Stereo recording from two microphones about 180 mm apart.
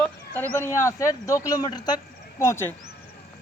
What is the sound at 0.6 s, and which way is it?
Speech, 15° left (ahead or behind).